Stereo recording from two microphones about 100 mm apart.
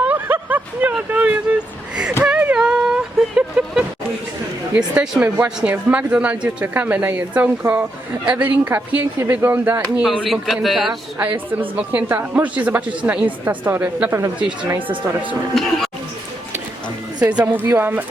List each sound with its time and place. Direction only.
0.0 s vehicle: 15° right (ahead or behind)
2.2 s a sound: 10° right (ahead or behind)
4.7 s speech: 10° right (ahead or behind)
10.0 s a man's voice: 5° right (ahead or behind)
11.2 s speech: 15° right (ahead or behind)
15.5 s a man's voice: centre (ahead or behind)
17.7 s speech: 20° right (ahead or behind)